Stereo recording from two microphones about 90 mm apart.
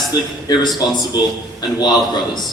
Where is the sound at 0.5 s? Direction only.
50° left (ahead or behind).